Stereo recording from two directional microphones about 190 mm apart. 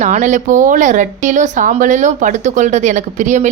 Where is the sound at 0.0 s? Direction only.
40° right (ahead or behind).